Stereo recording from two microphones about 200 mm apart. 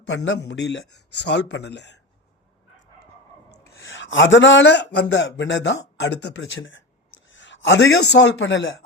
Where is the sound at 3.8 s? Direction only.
70° left (ahead or behind).